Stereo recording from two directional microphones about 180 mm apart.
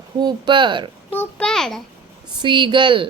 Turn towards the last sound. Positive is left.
turn(degrees=-25)  # may be behind; listen again after turning